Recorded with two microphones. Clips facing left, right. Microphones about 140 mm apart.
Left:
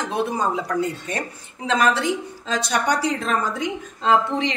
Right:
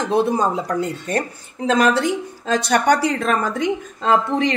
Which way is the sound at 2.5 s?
60° right (ahead or behind).